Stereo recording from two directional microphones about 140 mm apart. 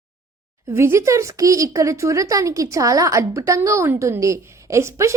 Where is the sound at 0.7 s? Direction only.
20° right (ahead or behind).